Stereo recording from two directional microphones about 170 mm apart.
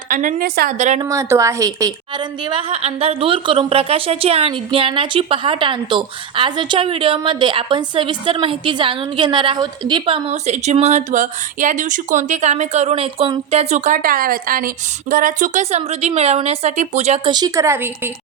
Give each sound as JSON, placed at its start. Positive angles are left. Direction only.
{"t": 0.1, "sound": "a woman's voice", "side_deg": -50}
{"t": 0.8, "sound": "a woman's voice", "side_deg": -45}
{"t": 1.0, "sound": "a woman's voice", "side_deg": -20}
{"t": 17.3, "sound": "a woman's voice", "side_deg": -20}